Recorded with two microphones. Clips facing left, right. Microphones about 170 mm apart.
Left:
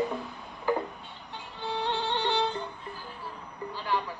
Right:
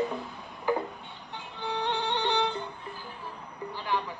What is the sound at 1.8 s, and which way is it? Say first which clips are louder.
Music: even; 15° right (ahead or behind).